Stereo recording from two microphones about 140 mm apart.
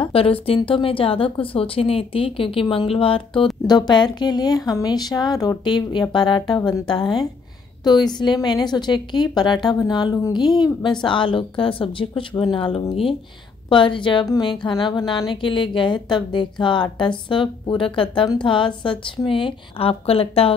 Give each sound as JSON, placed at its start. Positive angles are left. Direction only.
{"t": 0.0, "sound": "a woman's voice", "side_deg": 40}